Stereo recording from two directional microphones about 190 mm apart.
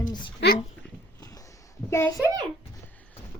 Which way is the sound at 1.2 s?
20° left (ahead or behind).